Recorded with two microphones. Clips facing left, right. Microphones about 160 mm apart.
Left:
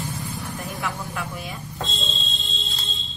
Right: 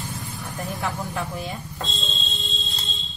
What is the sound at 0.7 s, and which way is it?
Speech, 25° right (ahead or behind).